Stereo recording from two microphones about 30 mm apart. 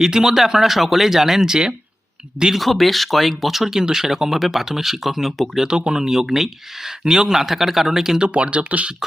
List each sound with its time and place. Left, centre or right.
0.0 s a man's voice: centre
2.6 s speech: centre
5.6 s speech: right
7.0 s a man's voice: right
7.3 s speech: centre
8.3 s speech: right